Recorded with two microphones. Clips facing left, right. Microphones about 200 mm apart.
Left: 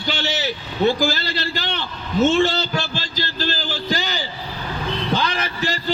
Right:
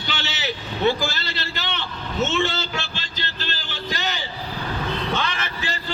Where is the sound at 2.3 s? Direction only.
35° left (ahead or behind).